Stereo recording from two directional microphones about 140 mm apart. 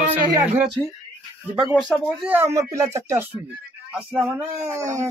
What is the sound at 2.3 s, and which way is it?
Speech, 15° right (ahead or behind).